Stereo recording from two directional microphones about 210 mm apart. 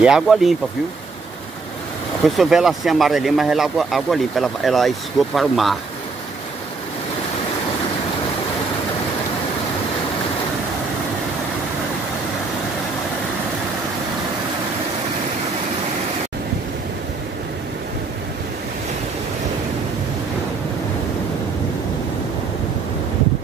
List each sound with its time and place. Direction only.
0.0 s speech: centre (ahead or behind)
2.2 s speech: centre (ahead or behind)